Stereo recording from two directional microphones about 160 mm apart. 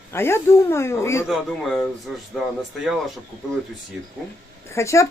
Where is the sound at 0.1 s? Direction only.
15° left (ahead or behind).